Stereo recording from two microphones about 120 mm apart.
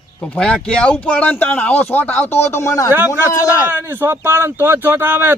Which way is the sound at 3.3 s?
30° left (ahead or behind).